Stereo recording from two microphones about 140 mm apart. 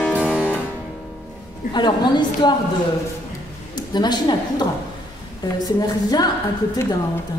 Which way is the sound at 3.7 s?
30° left (ahead or behind).